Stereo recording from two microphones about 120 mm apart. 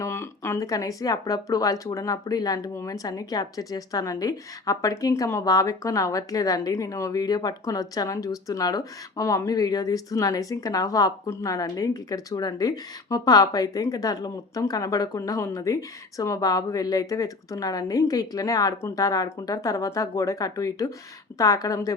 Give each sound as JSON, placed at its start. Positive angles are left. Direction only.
{"t": 0.0, "sound": "speech", "side_deg": 20}